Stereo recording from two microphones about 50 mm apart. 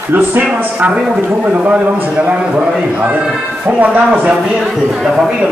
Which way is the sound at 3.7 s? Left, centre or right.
Right.